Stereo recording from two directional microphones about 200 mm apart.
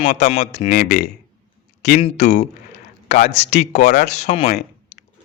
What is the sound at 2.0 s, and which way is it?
Speech, 30° left (ahead or behind).